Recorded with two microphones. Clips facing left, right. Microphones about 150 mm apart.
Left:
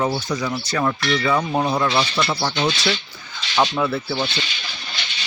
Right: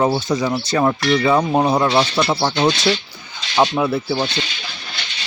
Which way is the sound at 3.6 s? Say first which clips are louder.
Right 3 dB; 20° right (ahead or behind).